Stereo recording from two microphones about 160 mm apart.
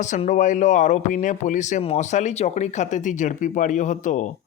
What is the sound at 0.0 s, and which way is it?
A man's voice, 50° left (ahead or behind).